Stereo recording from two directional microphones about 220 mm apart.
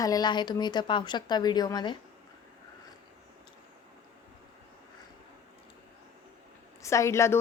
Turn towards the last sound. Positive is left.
turn(degrees=10)  # may be behind; listen again after turning